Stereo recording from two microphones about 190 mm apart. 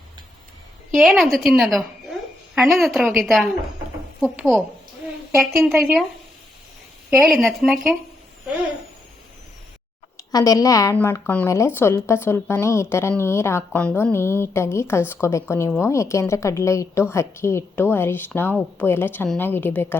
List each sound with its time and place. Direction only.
0.9 s a woman's voice: centre (ahead or behind)
7.2 s a woman's voice: centre (ahead or behind)
10.3 s speech: 20° left (ahead or behind)